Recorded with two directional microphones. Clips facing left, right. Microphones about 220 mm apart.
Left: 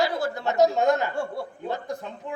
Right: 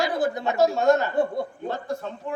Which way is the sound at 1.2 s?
20° right (ahead or behind).